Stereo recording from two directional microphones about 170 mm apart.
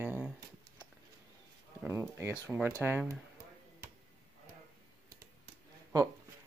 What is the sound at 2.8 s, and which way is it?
Speech, 10° right (ahead or behind).